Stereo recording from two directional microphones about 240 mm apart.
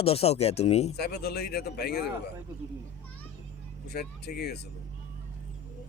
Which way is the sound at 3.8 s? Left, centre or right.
Left.